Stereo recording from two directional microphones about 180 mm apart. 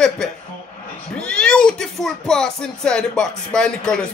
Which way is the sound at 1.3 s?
5° left (ahead or behind).